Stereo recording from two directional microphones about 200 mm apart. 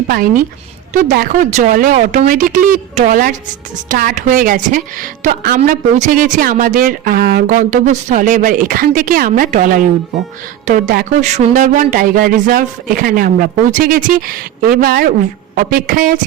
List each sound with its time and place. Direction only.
0.1 s speech: 45° right (ahead or behind)